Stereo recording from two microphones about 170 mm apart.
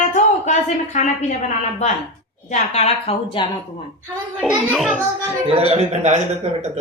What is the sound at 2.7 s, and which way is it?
Speech, 40° left (ahead or behind).